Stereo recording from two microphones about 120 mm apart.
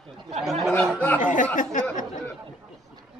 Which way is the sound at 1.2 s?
90° left.